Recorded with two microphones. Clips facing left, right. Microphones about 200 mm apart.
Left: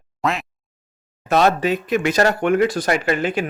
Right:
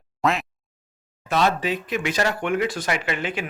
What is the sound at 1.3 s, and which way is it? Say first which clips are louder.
Speech: left 5 dB; 45° left (ahead or behind).